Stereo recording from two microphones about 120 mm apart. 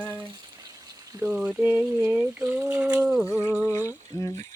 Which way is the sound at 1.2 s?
5° right (ahead or behind).